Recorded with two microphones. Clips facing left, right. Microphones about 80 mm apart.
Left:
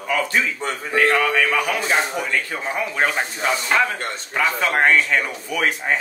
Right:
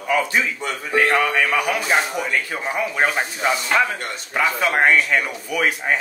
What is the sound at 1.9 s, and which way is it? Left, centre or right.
Speech, centre.